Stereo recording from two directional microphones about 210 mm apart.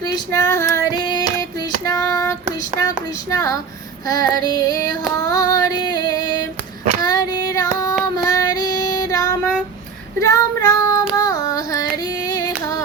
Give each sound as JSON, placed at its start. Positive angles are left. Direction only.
{"t": 0.0, "sound": "child singing", "side_deg": 15}
{"t": 3.2, "sound": "female singing", "side_deg": 15}
{"t": 7.0, "sound": "child singing", "side_deg": 20}
{"t": 11.2, "sound": "carnatic music", "side_deg": 15}